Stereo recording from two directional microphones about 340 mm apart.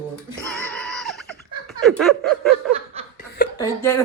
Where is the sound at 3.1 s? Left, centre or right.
Left.